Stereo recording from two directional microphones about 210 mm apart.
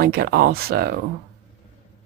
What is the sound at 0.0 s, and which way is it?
Speech, 45° right (ahead or behind).